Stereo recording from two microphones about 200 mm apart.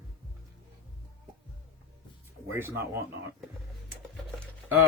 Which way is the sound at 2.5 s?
10° right (ahead or behind).